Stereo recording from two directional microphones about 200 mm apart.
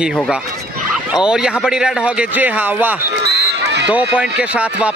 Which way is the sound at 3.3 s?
60° right (ahead or behind).